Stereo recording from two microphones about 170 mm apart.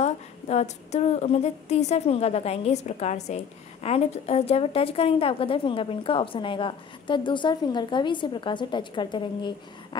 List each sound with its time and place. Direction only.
0.0 s a woman's voice: 40° left (ahead or behind)